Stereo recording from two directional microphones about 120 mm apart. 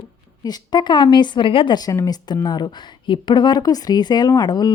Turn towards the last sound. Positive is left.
turn(degrees=35)  # may be behind; listen again after turning